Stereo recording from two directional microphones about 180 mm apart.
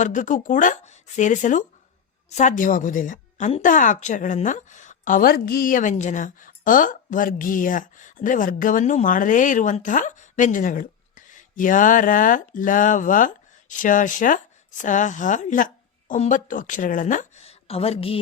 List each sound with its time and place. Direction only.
0.0 s a woman's voice: 45° left (ahead or behind)